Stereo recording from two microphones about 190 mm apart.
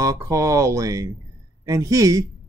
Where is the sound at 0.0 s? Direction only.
15° right (ahead or behind).